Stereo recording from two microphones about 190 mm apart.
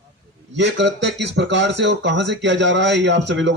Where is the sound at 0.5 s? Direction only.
65° right (ahead or behind).